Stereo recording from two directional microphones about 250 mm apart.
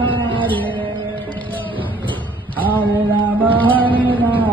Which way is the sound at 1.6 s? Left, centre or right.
Centre.